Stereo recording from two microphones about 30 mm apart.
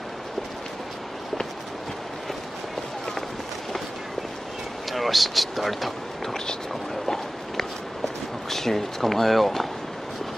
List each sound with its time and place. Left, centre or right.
4.9 s speech: centre
8.5 s speech: centre